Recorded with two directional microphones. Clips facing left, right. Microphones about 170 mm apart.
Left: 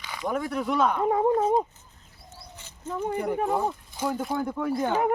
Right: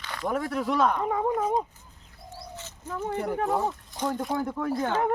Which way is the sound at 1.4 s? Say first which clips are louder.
Left 3 dB; 30° left (ahead or behind).